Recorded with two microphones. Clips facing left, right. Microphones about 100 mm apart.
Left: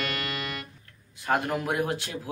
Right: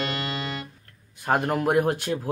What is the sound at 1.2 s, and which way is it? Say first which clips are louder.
Speech: right 4 dB; 45° right (ahead or behind).